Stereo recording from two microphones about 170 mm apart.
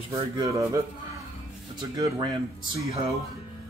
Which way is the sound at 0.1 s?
15° right (ahead or behind).